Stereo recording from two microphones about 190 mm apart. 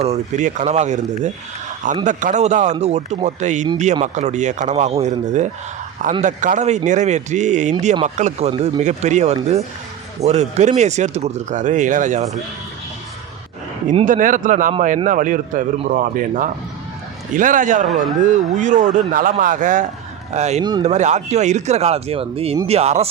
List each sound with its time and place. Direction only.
0.0 s speech: 35° right (ahead or behind)
14.0 s a man's voice: 45° right (ahead or behind)
17.8 s speech: centre (ahead or behind)
18.2 s a man's voice: 40° right (ahead or behind)